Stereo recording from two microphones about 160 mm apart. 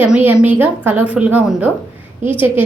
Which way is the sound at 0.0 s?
10° right (ahead or behind).